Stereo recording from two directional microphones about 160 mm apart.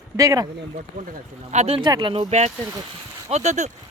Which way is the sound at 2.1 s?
40° right (ahead or behind).